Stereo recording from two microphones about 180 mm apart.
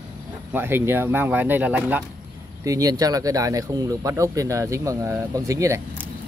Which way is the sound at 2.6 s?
20° right (ahead or behind).